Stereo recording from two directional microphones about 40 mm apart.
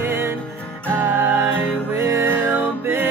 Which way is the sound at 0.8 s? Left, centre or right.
Right.